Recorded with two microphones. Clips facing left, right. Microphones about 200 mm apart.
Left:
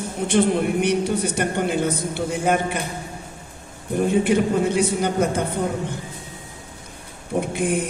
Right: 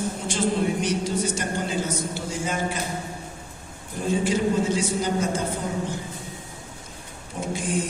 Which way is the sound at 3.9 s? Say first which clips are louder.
Left 6 dB; 60° left (ahead or behind).